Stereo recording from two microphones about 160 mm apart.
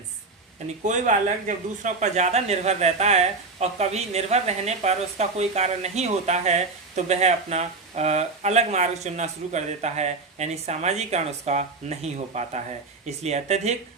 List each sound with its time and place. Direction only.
0.9 s speech: 50° right (ahead or behind)